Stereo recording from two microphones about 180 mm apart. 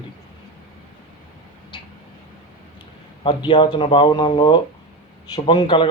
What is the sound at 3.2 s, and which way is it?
A man's voice, 30° left (ahead or behind).